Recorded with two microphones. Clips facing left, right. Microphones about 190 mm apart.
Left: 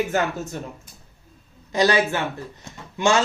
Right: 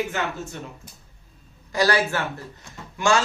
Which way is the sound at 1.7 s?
20° left (ahead or behind).